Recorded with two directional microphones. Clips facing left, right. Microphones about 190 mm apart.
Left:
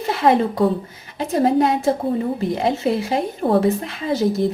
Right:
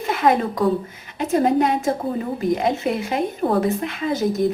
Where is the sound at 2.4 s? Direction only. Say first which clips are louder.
Even; 30° left (ahead or behind).